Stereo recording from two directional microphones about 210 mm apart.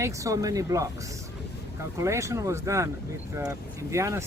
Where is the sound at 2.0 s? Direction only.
15° right (ahead or behind).